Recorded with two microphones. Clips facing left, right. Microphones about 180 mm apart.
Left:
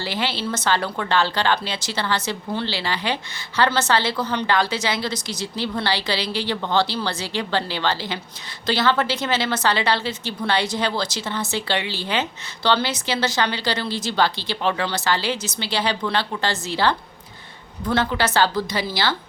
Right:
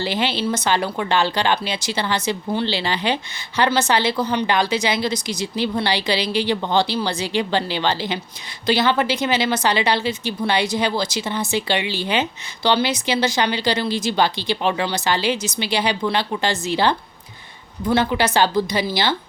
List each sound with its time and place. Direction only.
0.0 s a woman's voice: 20° right (ahead or behind)